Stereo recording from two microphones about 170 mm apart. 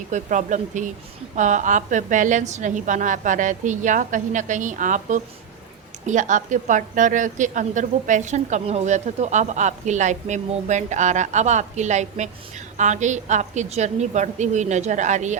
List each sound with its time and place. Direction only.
0.1 s a woman's voice: 45° right (ahead or behind)